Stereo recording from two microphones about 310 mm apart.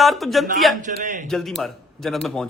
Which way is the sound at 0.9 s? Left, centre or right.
Right.